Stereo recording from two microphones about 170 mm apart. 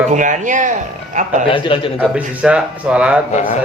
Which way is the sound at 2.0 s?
5° right (ahead or behind).